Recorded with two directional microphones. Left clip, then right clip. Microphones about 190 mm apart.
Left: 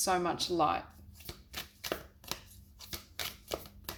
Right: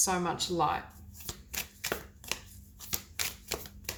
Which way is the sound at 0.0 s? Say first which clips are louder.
Even; 40° left (ahead or behind).